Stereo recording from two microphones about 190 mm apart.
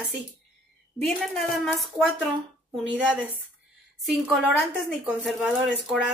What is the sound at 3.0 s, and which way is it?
Speech, 5° right (ahead or behind).